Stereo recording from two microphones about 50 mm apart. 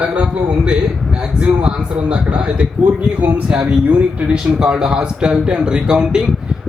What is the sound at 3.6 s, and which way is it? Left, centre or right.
Speech, right.